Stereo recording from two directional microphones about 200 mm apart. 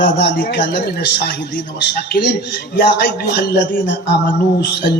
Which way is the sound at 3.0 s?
55° left (ahead or behind).